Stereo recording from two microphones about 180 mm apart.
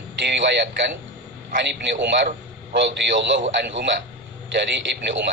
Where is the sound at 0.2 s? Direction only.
75° right (ahead or behind).